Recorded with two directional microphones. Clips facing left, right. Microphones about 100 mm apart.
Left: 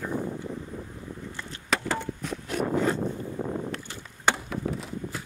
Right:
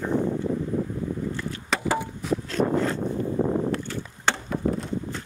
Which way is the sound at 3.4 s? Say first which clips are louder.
Right 7 dB; 55° right (ahead or behind).